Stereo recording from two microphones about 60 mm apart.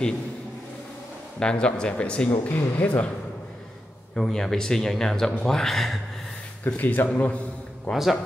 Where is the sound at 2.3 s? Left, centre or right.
Left.